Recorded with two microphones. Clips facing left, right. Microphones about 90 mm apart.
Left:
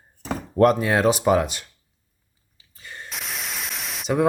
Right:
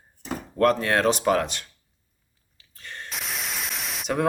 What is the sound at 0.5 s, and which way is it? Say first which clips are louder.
Speech: left 3 dB; 15° left (ahead or behind).